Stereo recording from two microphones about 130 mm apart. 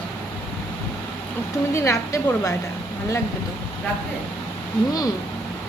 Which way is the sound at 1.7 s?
25° left (ahead or behind).